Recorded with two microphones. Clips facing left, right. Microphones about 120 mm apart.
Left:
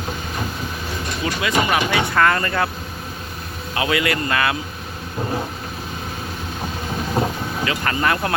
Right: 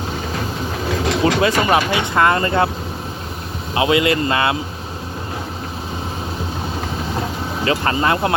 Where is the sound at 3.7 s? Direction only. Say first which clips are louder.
Right 5 dB; 25° right (ahead or behind).